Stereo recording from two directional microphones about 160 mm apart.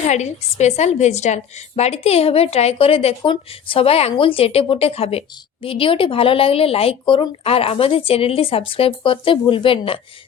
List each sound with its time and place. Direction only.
0.1 s a woman's voice: 45° left (ahead or behind)